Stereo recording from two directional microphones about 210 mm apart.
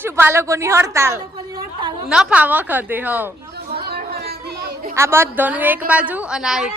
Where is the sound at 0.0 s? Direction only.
10° right (ahead or behind).